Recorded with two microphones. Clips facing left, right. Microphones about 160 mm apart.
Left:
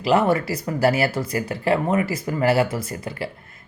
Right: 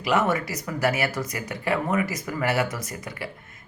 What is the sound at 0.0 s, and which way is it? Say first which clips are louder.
Speech: left 5 dB; 30° left (ahead or behind).